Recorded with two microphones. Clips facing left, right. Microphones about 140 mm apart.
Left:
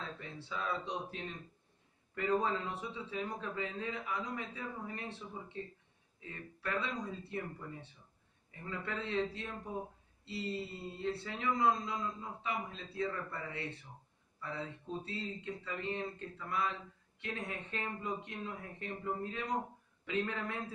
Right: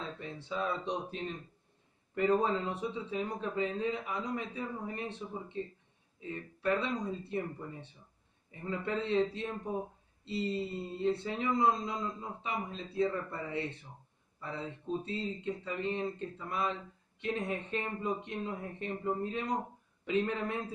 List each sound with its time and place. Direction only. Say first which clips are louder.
0.0 s a man's voice: right 4 dB; 20° right (ahead or behind)
8.6 s a man's voice: right 6 dB; 20° right (ahead or behind)
11.0 s a man's voice: right 7 dB; 20° right (ahead or behind)